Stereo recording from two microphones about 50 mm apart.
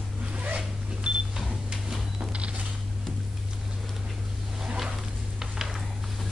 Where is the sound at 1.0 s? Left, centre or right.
Centre.